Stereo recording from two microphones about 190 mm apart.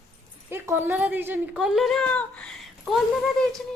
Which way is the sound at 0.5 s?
10° right (ahead or behind).